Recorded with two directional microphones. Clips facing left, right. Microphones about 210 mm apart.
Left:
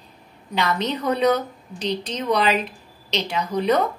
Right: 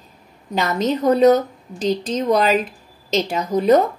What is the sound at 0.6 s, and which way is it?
A woman's voice, 45° right (ahead or behind).